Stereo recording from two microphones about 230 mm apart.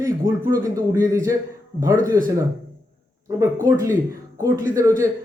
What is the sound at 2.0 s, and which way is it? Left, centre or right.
Speech, right.